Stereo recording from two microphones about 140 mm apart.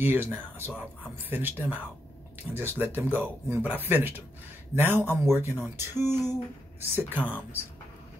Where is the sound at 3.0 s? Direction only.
15° right (ahead or behind).